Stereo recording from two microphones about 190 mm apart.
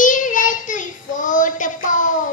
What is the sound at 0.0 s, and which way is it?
Child singing, 45° left (ahead or behind).